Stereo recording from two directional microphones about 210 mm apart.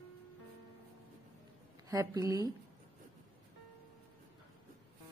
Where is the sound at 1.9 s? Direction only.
15° right (ahead or behind).